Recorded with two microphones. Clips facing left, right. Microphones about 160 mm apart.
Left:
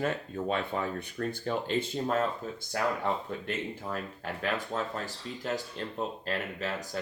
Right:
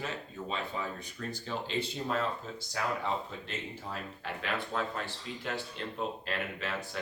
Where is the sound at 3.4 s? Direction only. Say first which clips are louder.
Left 6 dB; 50° left (ahead or behind).